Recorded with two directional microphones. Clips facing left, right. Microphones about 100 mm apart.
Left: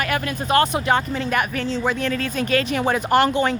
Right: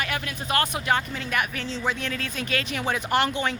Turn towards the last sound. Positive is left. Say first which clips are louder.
# left 6 dB
turn(degrees=45)  # may be behind; listen again after turning